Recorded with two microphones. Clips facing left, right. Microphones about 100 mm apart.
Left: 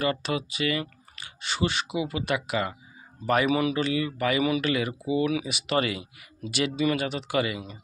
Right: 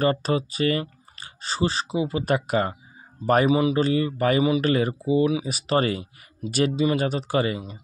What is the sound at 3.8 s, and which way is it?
Speech, 40° right (ahead or behind).